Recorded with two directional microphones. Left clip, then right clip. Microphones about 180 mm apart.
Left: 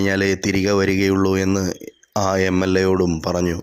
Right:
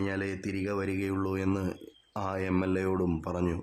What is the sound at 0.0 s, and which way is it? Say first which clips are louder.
A man's voice: left 14 dB; 35° left (ahead or behind).